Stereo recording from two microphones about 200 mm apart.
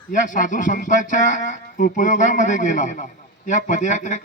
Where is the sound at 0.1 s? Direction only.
40° left (ahead or behind).